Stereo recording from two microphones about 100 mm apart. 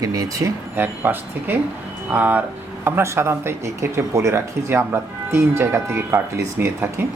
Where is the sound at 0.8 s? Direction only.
20° right (ahead or behind).